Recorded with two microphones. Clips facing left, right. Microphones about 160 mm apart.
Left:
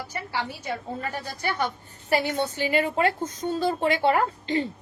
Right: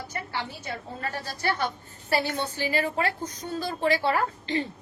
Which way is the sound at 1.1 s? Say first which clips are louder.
Even; 15° left (ahead or behind).